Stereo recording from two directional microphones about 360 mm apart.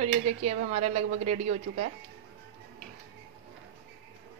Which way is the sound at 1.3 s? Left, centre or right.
Right.